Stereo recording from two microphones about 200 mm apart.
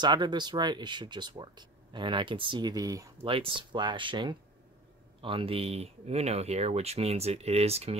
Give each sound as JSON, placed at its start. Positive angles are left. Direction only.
{"t": 0.0, "sound": "speech", "side_deg": -20}